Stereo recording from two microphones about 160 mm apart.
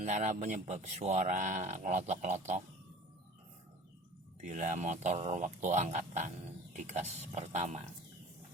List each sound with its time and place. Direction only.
0.0 s speech: 50° right (ahead or behind)
4.4 s speech: 50° right (ahead or behind)